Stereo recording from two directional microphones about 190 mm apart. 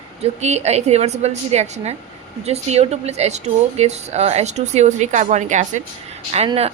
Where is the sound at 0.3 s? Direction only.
35° right (ahead or behind).